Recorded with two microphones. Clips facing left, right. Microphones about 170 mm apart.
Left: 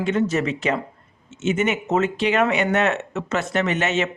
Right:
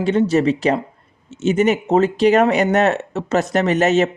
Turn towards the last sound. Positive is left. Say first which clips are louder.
# right 6 dB
turn(degrees=-40)  # may be behind; listen again after turning